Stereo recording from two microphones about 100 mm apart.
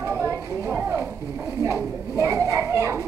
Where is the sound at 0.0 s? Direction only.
25° right (ahead or behind).